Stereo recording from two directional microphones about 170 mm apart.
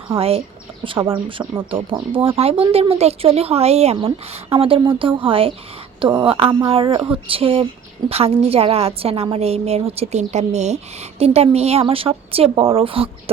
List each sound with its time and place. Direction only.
0.2 s a woman's voice: 35° right (ahead or behind)